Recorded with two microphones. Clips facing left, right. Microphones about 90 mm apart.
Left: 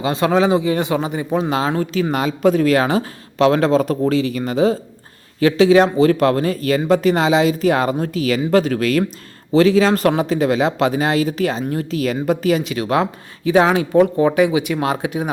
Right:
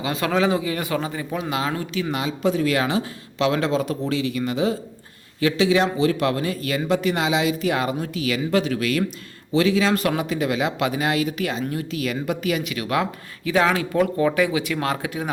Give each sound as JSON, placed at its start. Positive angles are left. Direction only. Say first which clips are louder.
{"t": 0.0, "sound": "speech", "louder": "left 5 dB", "side_deg": 25}